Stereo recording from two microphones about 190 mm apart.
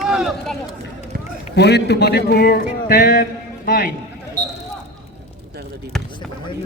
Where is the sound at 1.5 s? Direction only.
60° left (ahead or behind).